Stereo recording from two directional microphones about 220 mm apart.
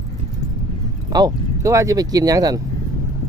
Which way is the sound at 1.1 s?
15° right (ahead or behind).